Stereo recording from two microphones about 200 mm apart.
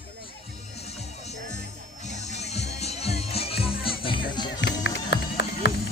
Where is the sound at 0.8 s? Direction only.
30° left (ahead or behind).